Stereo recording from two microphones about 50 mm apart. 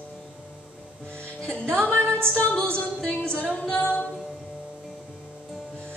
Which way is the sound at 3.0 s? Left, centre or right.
Centre.